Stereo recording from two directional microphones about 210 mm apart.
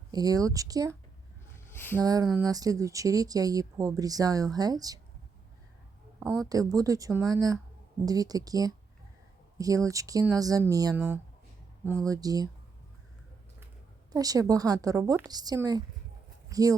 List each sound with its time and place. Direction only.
0.1 s speech: 20° right (ahead or behind)
1.5 s a sound: 10° left (ahead or behind)
2.0 s speech: 15° right (ahead or behind)
6.5 s speech: 15° right (ahead or behind)
14.1 s speech: 15° right (ahead or behind)